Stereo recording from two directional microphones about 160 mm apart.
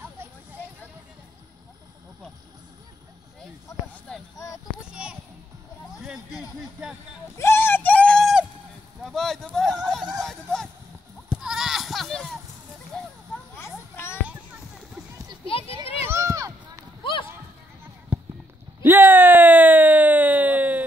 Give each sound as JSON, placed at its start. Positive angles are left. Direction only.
{"t": 3.8, "sound": "a sound", "side_deg": 10}
{"t": 4.7, "sound": "child singing", "side_deg": 5}
{"t": 7.3, "sound": "a sound", "side_deg": 15}
{"t": 11.2, "sound": "goat", "side_deg": -5}
{"t": 13.6, "sound": "children playing", "side_deg": 15}
{"t": 15.4, "sound": "children playing", "side_deg": 35}
{"t": 16.1, "sound": "run", "side_deg": -20}
{"t": 17.0, "sound": "run", "side_deg": 35}
{"t": 18.1, "sound": "clip-clop", "side_deg": -10}
{"t": 18.9, "sound": "a sound", "side_deg": -10}